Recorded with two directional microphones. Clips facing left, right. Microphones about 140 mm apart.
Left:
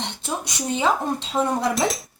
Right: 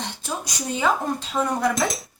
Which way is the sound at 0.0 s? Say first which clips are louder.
Left 2 dB; 25° left (ahead or behind).